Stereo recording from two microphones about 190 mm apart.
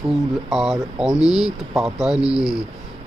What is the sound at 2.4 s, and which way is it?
Speech, 20° left (ahead or behind).